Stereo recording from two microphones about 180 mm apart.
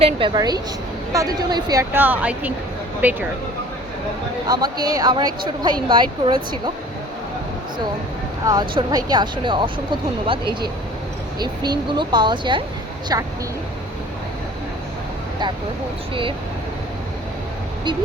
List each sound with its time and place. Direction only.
0.0 s a woman's voice: 25° right (ahead or behind); by 3.2 s 10° right (ahead or behind)
4.4 s a woman's voice: 20° right (ahead or behind)
8.4 s a woman's voice: 20° right (ahead or behind)
11.3 s a woman's voice: 25° right (ahead or behind)